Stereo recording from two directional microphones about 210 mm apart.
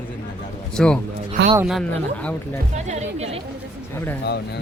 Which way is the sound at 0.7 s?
5° left (ahead or behind).